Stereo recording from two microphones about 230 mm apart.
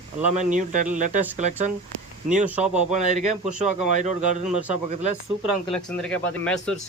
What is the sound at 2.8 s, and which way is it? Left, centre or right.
A man's voice, right.